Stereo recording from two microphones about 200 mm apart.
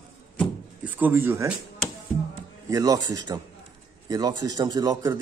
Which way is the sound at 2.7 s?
20° right (ahead or behind).